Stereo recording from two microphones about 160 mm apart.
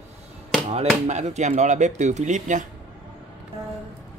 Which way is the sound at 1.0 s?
45° right (ahead or behind).